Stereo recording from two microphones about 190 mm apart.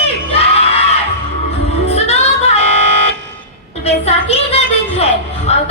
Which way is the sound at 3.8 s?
30° left (ahead or behind).